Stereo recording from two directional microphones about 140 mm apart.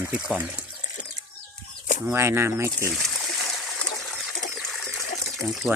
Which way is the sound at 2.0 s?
20° right (ahead or behind).